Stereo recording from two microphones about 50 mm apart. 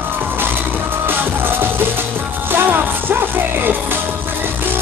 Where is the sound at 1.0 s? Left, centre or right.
Right.